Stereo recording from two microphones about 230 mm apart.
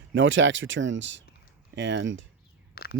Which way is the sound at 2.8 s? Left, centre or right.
Left.